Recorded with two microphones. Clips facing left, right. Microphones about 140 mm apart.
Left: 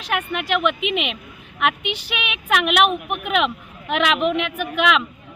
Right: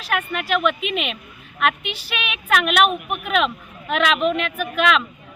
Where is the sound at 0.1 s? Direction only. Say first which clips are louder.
Even; 15° left (ahead or behind).